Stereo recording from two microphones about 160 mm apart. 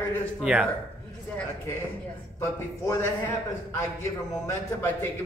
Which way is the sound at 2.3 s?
15° left (ahead or behind).